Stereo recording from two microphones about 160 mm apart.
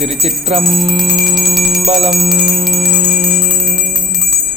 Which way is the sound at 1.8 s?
40° right (ahead or behind).